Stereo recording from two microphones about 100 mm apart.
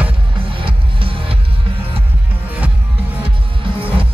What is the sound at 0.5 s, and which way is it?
Music, 60° right (ahead or behind).